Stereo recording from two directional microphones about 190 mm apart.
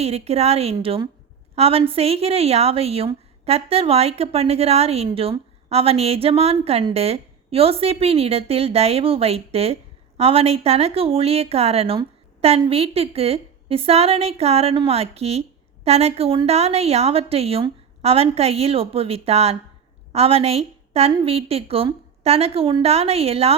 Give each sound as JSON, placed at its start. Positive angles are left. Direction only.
{"t": 0.0, "sound": "a woman's voice", "side_deg": -35}